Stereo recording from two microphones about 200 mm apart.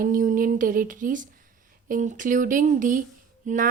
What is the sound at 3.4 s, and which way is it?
Music, 40° right (ahead or behind).